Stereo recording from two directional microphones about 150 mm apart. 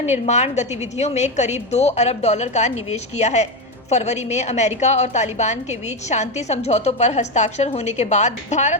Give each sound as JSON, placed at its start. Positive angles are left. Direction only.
{"t": 0.0, "sound": "a woman's voice", "side_deg": 50}